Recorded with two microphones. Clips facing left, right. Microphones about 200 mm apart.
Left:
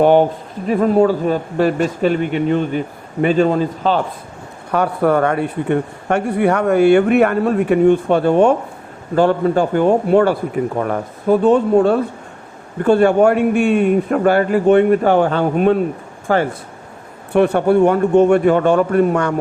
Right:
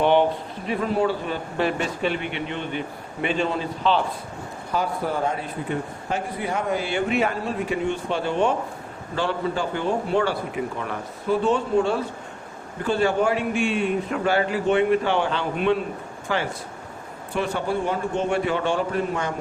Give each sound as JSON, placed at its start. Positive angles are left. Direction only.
{"t": 0.0, "sound": "a man's voice", "side_deg": 45}
{"t": 4.7, "sound": "a man's voice", "side_deg": 65}
{"t": 17.3, "sound": "a man's voice", "side_deg": 60}